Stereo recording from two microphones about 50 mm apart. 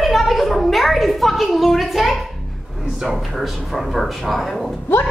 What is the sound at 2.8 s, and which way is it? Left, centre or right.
Speech, centre.